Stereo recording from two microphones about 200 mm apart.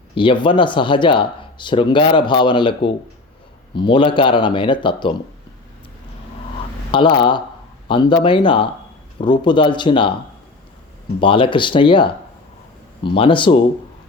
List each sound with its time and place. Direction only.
0.1 s speech: 25° left (ahead or behind)
6.9 s speech: 25° left (ahead or behind)
11.2 s speech: 25° left (ahead or behind)